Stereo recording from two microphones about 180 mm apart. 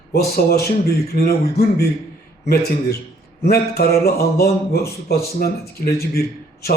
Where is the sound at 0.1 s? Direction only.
60° left (ahead or behind).